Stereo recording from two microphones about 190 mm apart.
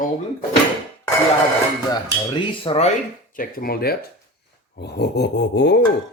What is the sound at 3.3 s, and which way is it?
Speech, 50° left (ahead or behind).